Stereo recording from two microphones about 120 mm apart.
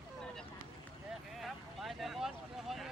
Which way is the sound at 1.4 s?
Centre (ahead or behind).